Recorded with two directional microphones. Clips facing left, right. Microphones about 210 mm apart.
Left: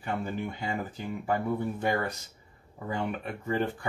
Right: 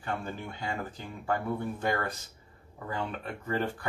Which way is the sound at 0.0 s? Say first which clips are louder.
Left 3 dB; 15° left (ahead or behind).